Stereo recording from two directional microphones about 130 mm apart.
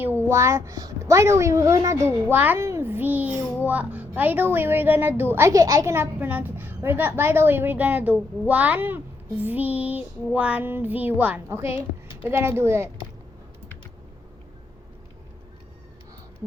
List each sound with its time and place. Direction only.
0.0 s a woman's voice: 15° right (ahead or behind)